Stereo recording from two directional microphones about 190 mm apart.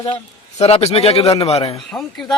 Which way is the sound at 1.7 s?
Centre (ahead or behind).